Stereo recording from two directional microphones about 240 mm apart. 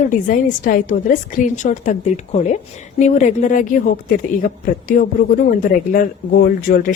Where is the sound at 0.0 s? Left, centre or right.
Left.